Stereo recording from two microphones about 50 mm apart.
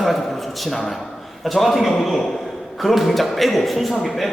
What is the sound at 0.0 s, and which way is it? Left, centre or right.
A man's voice, centre.